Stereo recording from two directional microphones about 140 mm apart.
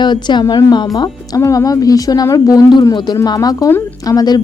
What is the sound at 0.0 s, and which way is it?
A woman's voice, 35° left (ahead or behind).